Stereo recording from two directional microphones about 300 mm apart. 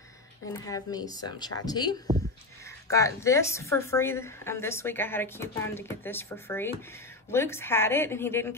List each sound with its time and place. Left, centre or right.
0.5 s a woman's voice: centre